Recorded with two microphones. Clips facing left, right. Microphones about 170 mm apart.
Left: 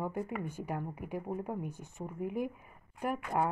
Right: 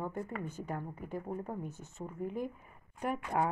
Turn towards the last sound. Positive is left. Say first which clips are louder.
# left 1 dB
turn(degrees=5)  # may be behind; listen again after turning